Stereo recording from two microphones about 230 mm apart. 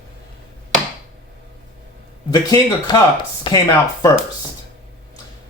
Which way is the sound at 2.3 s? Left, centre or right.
Centre.